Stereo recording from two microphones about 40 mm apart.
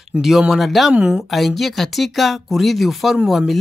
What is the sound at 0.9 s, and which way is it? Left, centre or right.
Speech, right.